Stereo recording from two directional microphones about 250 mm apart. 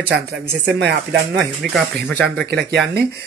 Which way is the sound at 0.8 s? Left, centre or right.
Right.